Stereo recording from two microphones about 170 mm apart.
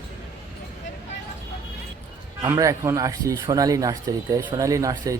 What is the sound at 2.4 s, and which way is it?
Speech, 20° right (ahead or behind).